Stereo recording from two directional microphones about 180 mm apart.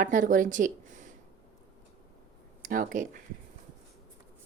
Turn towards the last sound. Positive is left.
turn(degrees=-50)  # may be behind; listen again after turning